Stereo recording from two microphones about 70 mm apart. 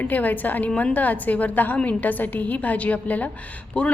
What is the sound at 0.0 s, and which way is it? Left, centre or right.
A woman's voice, left.